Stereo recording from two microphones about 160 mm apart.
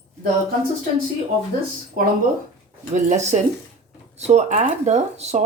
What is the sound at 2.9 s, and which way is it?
Speech, 50° right (ahead or behind).